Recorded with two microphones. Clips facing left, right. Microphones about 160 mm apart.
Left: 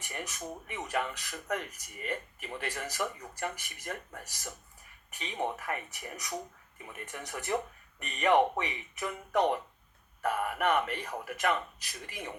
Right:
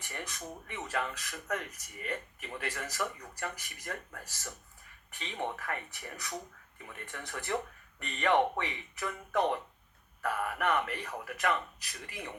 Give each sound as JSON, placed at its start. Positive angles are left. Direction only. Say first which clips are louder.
{"t": 0.1, "sound": "speech", "louder": "left 2 dB", "side_deg": 15}
{"t": 5.1, "sound": "speech", "louder": "left 3 dB", "side_deg": 20}